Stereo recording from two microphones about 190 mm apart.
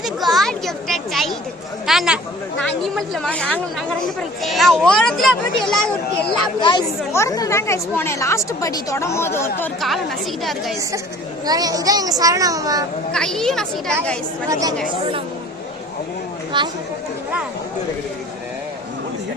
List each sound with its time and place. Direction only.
0.0 s a sound: centre (ahead or behind)
1.9 s speech: centre (ahead or behind)
6.6 s speech: 25° left (ahead or behind)
9.8 s speech: centre (ahead or behind)
11.4 s speech: 20° right (ahead or behind)
13.1 s speech: 5° left (ahead or behind)
14.5 s speech: 20° right (ahead or behind)
16.5 s speech: 25° right (ahead or behind)